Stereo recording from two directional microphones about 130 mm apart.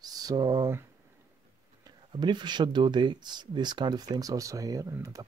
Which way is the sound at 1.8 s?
35° right (ahead or behind).